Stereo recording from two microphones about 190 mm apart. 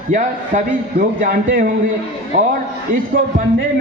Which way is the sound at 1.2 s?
40° right (ahead or behind).